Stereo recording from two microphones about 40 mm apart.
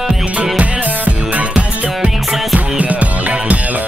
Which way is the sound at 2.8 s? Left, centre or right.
Right.